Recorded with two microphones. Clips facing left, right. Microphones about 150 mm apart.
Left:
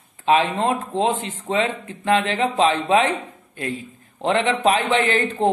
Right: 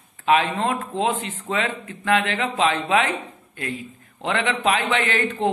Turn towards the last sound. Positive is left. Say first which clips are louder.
# left 3 dB
turn(degrees=30)  # may be behind; listen again after turning